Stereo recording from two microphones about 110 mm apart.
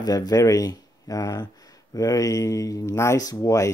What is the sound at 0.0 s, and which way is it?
Speech, 35° left (ahead or behind).